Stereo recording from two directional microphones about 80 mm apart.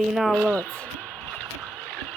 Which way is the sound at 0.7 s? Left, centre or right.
Centre.